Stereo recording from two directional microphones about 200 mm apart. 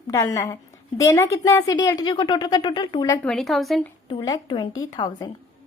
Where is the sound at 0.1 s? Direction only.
15° left (ahead or behind).